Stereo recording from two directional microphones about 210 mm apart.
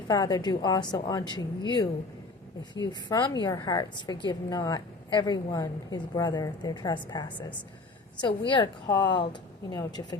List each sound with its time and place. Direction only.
0.1 s a woman's voice: 20° left (ahead or behind)